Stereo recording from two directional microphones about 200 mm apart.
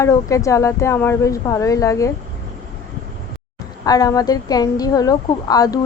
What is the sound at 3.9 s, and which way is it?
A woman's voice, 20° left (ahead or behind).